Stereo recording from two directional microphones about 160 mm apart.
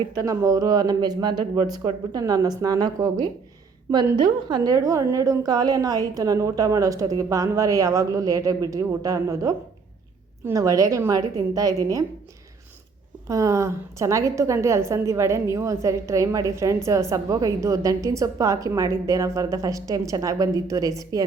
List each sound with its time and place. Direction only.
0.1 s a woman's voice: 20° right (ahead or behind)
13.2 s a woman's voice: 20° right (ahead or behind)